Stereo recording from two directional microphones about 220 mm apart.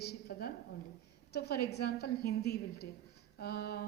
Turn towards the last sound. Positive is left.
turn(degrees=45)  # may be behind; listen again after turning